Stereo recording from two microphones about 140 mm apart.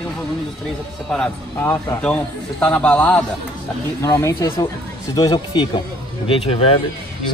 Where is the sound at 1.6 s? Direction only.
20° left (ahead or behind).